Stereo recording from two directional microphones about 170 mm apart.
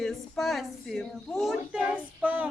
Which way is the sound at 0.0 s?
Centre (ahead or behind).